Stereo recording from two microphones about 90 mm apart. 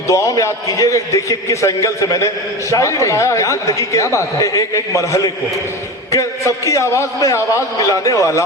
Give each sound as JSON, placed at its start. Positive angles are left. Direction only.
{"t": 0.1, "sound": "a man's voice", "side_deg": 35}